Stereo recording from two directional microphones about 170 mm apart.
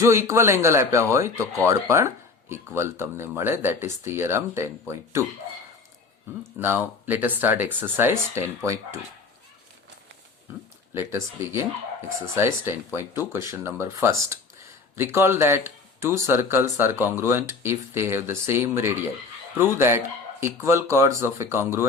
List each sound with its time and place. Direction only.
0.0 s speech: 15° right (ahead or behind)
6.6 s speech: 10° right (ahead or behind)
10.9 s speech: 15° right (ahead or behind)